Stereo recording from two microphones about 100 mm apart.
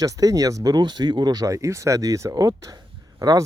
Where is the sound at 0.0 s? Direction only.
35° right (ahead or behind).